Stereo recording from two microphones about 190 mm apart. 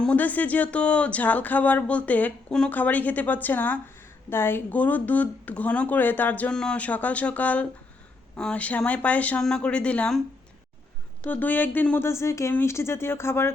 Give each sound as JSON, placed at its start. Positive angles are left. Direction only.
{"t": 0.0, "sound": "speech", "side_deg": 10}
{"t": 11.3, "sound": "speech", "side_deg": 10}